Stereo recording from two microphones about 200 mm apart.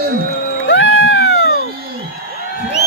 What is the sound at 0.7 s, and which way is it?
Cat, 65° left (ahead or behind).